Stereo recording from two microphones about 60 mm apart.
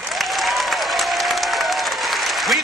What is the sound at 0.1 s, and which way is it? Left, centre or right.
Applause, centre.